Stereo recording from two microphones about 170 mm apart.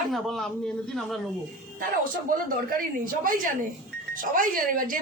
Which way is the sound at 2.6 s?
55° right (ahead or behind).